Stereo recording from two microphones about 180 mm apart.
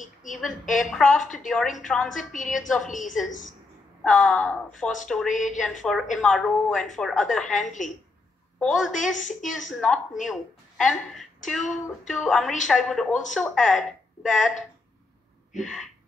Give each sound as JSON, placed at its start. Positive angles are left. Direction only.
{"t": 0.0, "sound": "a sound", "side_deg": 45}
{"t": 0.7, "sound": "a woman's voice", "side_deg": 0}
{"t": 2.3, "sound": "speech", "side_deg": 45}
{"t": 4.0, "sound": "a woman's voice", "side_deg": 0}
{"t": 5.3, "sound": "speech", "side_deg": 45}
{"t": 5.6, "sound": "a woman's voice", "side_deg": 0}
{"t": 9.1, "sound": "speech", "side_deg": 45}
{"t": 9.7, "sound": "a woman's voice", "side_deg": 0}